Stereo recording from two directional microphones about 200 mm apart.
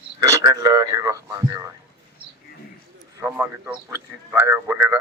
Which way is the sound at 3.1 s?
10° right (ahead or behind).